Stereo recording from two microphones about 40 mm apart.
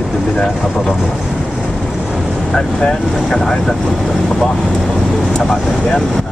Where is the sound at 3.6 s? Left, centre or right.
Centre.